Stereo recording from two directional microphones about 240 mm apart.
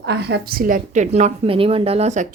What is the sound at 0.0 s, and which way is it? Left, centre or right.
Speech, right.